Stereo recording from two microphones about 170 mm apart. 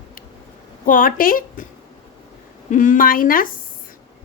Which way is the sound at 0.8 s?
55° left (ahead or behind).